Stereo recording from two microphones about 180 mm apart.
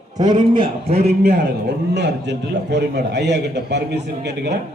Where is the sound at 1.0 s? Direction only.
60° right (ahead or behind).